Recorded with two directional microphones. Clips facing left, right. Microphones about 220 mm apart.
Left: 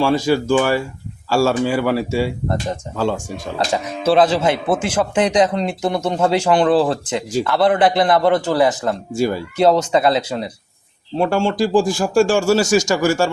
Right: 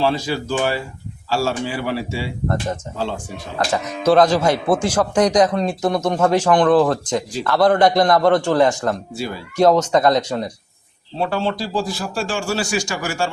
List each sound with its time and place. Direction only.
0.0 s speech: 45° left (ahead or behind)
3.7 s a man's voice: 5° left (ahead or behind)
9.1 s speech: 45° left (ahead or behind)
9.6 s speech: 10° left (ahead or behind)
11.3 s speech: 50° left (ahead or behind)